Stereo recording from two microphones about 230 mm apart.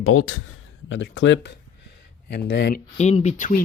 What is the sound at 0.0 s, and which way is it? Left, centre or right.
Speech, left.